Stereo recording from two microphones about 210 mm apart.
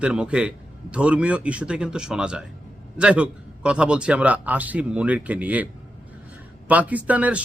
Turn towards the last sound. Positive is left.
turn(degrees=-5)  # may be behind; listen again after turning